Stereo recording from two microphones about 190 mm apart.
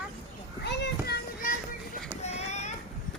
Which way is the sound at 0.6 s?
60° left (ahead or behind).